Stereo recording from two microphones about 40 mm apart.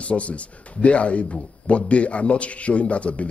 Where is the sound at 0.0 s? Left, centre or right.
Left.